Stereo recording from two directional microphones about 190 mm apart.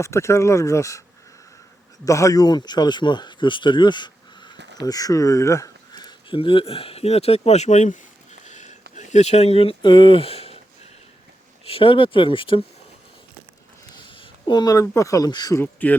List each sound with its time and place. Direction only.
0.0 s speech: 15° left (ahead or behind)
2.0 s speech: 15° left (ahead or behind); by 10.6 s 30° left (ahead or behind)
11.7 s speech: 25° left (ahead or behind)
13.9 s speech: 25° left (ahead or behind); by 16.0 s 10° left (ahead or behind)